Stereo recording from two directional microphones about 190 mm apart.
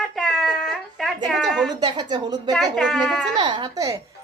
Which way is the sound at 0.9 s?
Centre (ahead or behind).